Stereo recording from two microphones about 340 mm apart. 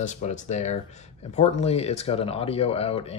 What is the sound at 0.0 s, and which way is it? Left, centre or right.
Speech, left.